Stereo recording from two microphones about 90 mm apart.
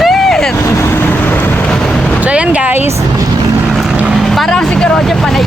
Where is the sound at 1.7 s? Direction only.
5° left (ahead or behind).